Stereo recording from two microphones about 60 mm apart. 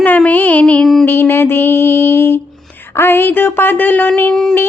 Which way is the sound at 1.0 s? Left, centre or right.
Left.